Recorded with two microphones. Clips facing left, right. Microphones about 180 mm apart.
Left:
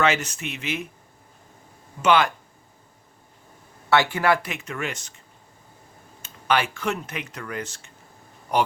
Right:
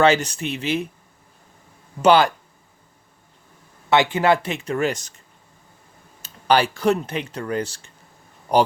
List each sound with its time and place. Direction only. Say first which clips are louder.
0.0 s speech: right 6 dB; 35° right (ahead or behind)
2.0 s speech: right 4 dB; 35° right (ahead or behind)
3.8 s speech: right 3 dB; 20° right (ahead or behind); by 5.1 s 40° right (ahead or behind)
6.2 s speech: right 5 dB; 35° right (ahead or behind)